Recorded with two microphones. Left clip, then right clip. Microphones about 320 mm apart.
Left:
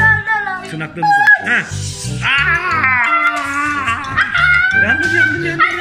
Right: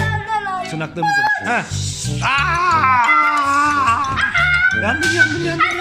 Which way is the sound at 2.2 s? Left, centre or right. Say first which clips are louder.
Left 2 dB; centre.